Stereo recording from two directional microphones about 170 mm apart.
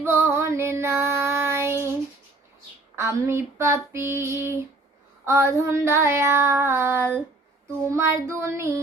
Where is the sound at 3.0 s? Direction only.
15° right (ahead or behind).